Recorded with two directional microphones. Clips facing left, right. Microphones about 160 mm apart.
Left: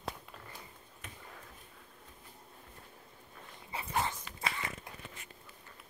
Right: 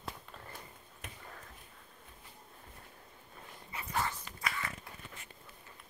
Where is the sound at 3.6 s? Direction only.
25° left (ahead or behind).